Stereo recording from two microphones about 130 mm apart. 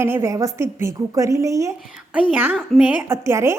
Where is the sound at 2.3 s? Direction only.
10° right (ahead or behind).